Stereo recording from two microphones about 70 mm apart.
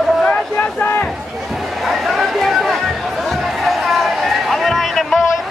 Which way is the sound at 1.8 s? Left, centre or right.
Centre.